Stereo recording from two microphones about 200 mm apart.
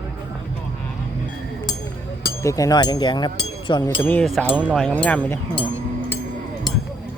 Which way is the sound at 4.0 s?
10° left (ahead or behind).